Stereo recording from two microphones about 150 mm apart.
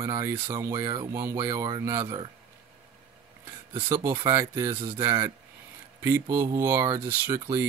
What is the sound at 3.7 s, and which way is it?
Speech, 15° right (ahead or behind).